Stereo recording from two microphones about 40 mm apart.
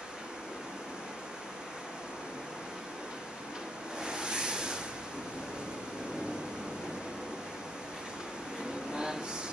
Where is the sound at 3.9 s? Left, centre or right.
Right.